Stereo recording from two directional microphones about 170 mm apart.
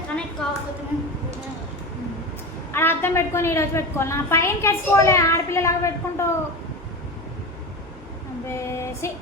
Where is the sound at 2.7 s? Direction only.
15° left (ahead or behind).